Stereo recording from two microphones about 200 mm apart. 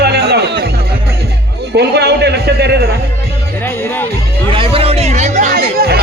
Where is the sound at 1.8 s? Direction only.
55° right (ahead or behind).